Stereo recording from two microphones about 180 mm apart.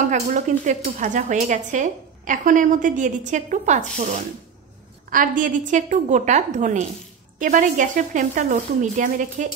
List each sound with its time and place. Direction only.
0.0 s dishes: 45° right (ahead or behind)